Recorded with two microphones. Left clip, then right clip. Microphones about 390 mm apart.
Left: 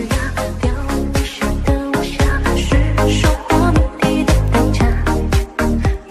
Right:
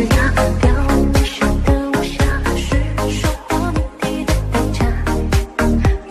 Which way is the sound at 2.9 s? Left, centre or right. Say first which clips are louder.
Left 7 dB; left.